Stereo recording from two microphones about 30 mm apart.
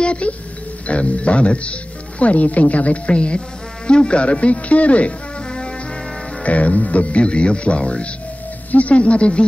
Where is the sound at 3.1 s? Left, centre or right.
Left.